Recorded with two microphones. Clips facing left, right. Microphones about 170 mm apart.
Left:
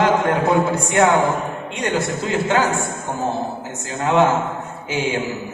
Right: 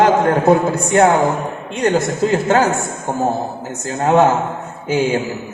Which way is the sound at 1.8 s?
40° right (ahead or behind).